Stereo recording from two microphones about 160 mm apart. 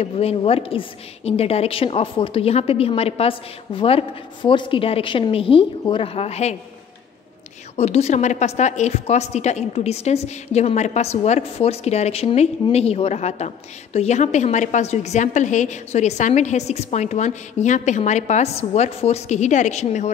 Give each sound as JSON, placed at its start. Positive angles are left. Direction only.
{"t": 0.0, "sound": "a woman's voice", "side_deg": 40}
{"t": 7.7, "sound": "a woman's voice", "side_deg": 40}